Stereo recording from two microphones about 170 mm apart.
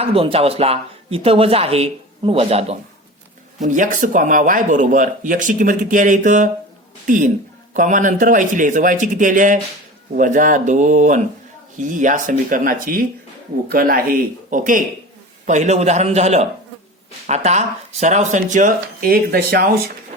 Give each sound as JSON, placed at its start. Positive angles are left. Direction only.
{"t": 0.0, "sound": "speech", "side_deg": -35}
{"t": 3.6, "sound": "speech", "side_deg": -50}